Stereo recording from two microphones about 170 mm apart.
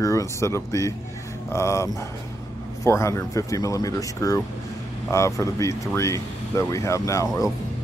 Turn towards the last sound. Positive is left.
turn(degrees=20)  # may be behind; listen again after turning